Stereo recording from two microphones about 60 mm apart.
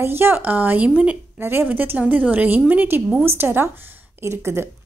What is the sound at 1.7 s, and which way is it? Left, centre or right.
Speech, right.